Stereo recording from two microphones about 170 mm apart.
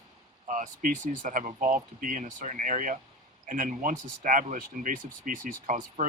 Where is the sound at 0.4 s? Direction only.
50° right (ahead or behind).